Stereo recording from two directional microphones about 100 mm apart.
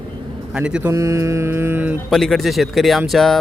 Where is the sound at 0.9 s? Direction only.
30° right (ahead or behind).